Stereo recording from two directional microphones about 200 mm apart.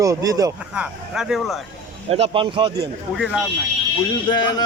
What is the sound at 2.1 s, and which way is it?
Speech, 30° right (ahead or behind).